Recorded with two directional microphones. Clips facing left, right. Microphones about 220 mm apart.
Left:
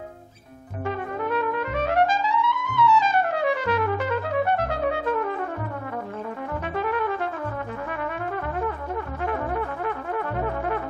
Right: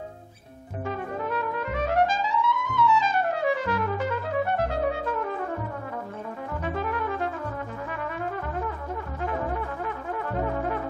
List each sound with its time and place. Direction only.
0.8 s trumpet: 70° left (ahead or behind)
6.6 s trumpet: 65° left (ahead or behind)
7.9 s brass instrument: 65° left (ahead or behind)